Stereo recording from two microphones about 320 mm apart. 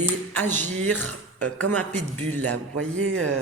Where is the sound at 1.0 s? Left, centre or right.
Right.